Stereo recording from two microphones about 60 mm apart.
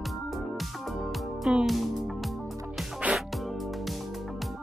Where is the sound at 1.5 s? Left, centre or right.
Centre.